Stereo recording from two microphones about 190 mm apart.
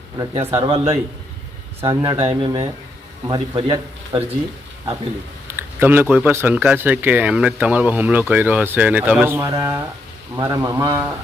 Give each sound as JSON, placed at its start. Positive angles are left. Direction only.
{"t": 0.5, "sound": "speech", "side_deg": -25}
{"t": 5.5, "sound": "speech", "side_deg": -10}